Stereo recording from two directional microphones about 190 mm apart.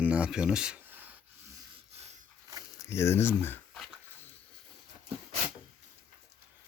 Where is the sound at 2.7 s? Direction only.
15° left (ahead or behind).